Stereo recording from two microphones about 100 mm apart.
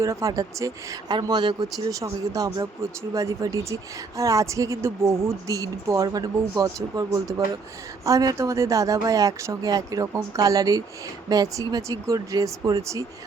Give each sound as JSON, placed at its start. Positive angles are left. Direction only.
{"t": 0.0, "sound": "speech", "side_deg": -35}
{"t": 1.1, "sound": "speech", "side_deg": -45}
{"t": 1.9, "sound": "speech", "side_deg": -35}